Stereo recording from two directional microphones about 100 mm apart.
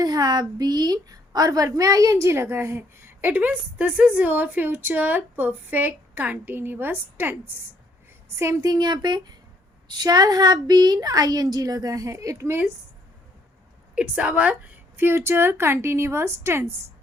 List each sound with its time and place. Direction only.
0.0 s a woman's voice: 40° right (ahead or behind); by 7.3 s 20° right (ahead or behind)
8.4 s a woman's voice: 35° right (ahead or behind)
13.9 s a woman's voice: 15° right (ahead or behind)